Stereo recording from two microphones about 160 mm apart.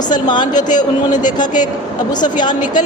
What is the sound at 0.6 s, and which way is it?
Speech, 50° left (ahead or behind).